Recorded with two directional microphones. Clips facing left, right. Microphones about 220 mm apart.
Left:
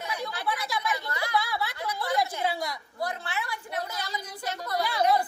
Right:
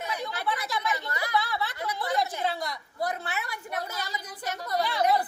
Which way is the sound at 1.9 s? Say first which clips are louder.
Left 1 dB; 20° right (ahead or behind).